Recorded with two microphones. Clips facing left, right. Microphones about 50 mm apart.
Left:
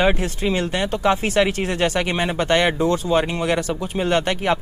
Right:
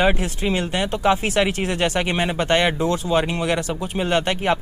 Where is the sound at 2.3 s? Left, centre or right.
Right.